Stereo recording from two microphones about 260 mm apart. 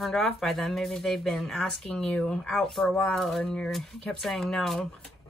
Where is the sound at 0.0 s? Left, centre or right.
Centre.